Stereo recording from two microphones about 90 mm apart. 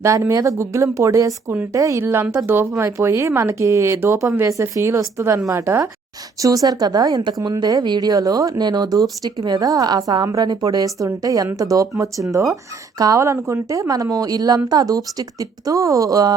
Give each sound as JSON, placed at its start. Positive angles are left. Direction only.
{"t": 0.0, "sound": "speech", "side_deg": -35}
{"t": 6.4, "sound": "a woman's voice", "side_deg": -40}